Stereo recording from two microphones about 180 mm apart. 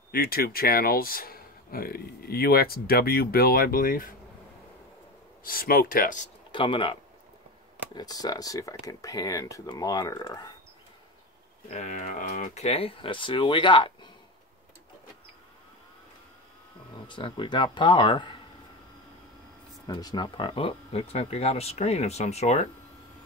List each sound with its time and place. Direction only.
0.1 s speech: 55° left (ahead or behind)
5.4 s speech: 55° left (ahead or behind)
6.5 s speech: 25° left (ahead or behind)
11.7 s speech: 45° left (ahead or behind); by 13.9 s 25° left (ahead or behind)
17.1 s speech: 25° left (ahead or behind)
19.9 s speech: 20° left (ahead or behind); by 22.7 s 35° left (ahead or behind)